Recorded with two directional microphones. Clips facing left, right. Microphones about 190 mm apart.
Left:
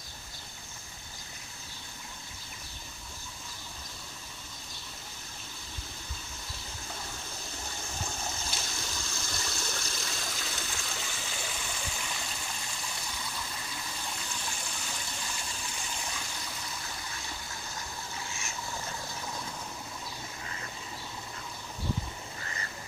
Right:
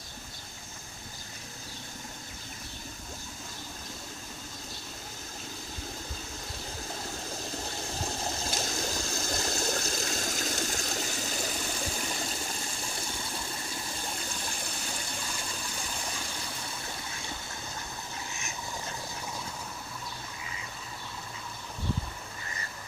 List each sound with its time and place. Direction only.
8.0 s water: 35° right (ahead or behind)